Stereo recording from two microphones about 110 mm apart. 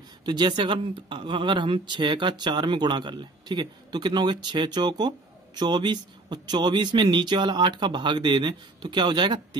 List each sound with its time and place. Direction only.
0.2 s speech: 40° right (ahead or behind)